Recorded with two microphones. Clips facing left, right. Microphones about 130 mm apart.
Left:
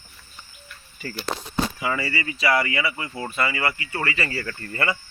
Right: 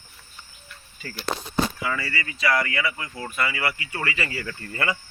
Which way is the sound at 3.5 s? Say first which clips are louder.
Left 2 dB; 20° left (ahead or behind).